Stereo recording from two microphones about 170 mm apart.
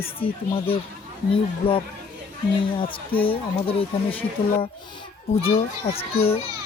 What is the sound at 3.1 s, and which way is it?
Speech, 30° left (ahead or behind).